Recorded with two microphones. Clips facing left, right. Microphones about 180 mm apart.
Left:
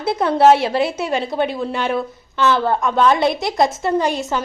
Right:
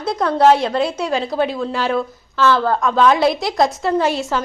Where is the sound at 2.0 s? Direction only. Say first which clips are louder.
Right 1 dB; 20° left (ahead or behind).